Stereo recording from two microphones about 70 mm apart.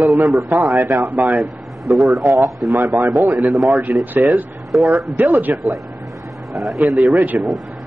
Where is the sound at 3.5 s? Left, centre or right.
Centre.